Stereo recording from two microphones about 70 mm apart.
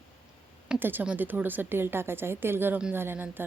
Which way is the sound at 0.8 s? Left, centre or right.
Right.